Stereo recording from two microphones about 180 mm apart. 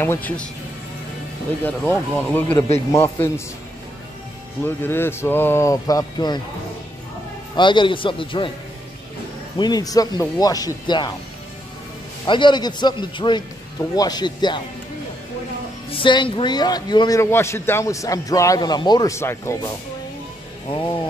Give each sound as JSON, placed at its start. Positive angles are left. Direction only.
{"t": 0.0, "sound": "speech", "side_deg": 10}
{"t": 1.6, "sound": "speech", "side_deg": 10}
{"t": 4.6, "sound": "speech", "side_deg": 10}
{"t": 7.5, "sound": "a man's voice", "side_deg": 25}
{"t": 9.6, "sound": "a man's voice", "side_deg": 20}
{"t": 12.3, "sound": "a man's voice", "side_deg": 25}
{"t": 15.9, "sound": "a man's voice", "side_deg": 25}